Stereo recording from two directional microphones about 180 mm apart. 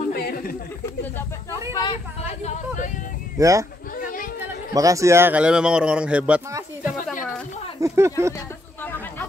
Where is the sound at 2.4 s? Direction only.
40° left (ahead or behind).